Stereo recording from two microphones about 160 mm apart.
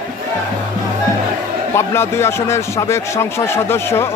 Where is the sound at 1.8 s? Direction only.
15° left (ahead or behind).